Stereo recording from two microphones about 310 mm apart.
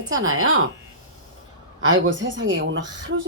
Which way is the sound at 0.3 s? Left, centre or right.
Right.